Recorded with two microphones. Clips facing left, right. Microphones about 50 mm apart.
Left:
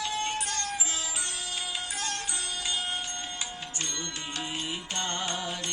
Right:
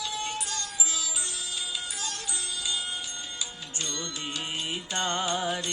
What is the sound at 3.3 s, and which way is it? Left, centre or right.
Music, left.